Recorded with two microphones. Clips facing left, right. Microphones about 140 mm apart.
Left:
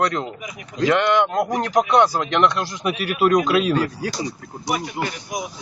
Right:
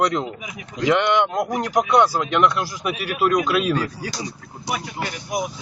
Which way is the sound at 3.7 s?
45° left (ahead or behind).